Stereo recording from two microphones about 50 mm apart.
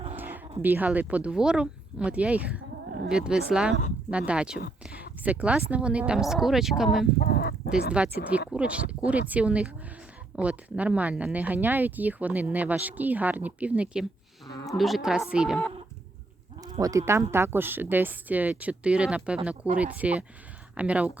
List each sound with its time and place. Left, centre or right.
0.2 s a sound: right
0.9 s speech: right
1.3 s speech: centre
2.1 s speech: right
3.1 s speech: centre
6.1 s speech: centre
7.7 s speech: right
14.7 s a woman's voice: centre
15.3 s speech: centre
17.1 s speech: right